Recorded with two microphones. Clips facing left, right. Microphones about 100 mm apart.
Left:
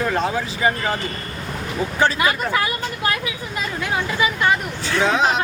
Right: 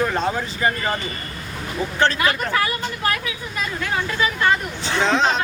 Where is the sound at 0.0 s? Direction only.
Centre (ahead or behind).